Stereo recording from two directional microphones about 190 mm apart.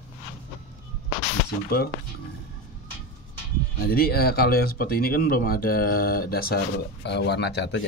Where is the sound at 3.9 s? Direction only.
50° left (ahead or behind).